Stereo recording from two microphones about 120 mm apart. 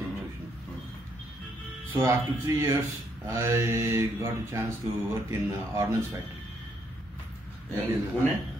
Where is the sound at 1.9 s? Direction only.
20° right (ahead or behind).